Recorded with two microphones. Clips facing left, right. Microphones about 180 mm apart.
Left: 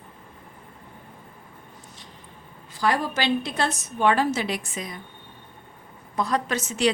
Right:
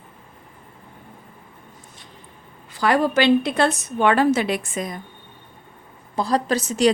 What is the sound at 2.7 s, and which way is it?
A woman's voice, 60° right (ahead or behind).